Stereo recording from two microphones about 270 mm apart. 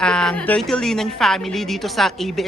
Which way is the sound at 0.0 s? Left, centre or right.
Centre.